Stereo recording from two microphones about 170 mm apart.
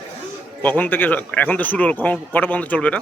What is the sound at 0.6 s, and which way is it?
A man's voice, 10° left (ahead or behind).